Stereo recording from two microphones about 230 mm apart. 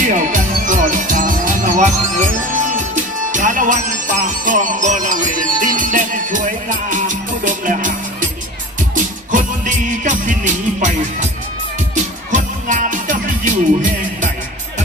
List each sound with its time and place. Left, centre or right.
0.1 s music: right